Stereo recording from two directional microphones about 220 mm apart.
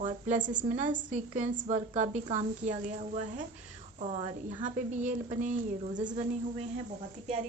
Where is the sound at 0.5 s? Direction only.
30° right (ahead or behind).